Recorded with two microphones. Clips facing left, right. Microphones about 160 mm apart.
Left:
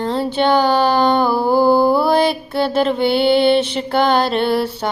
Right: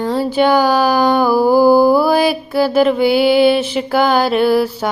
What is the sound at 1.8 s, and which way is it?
Mantra, 25° left (ahead or behind).